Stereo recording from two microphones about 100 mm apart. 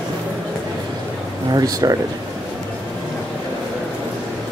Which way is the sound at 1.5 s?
40° right (ahead or behind).